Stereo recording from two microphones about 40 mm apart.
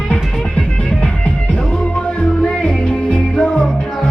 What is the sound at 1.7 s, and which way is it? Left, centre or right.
Music, left.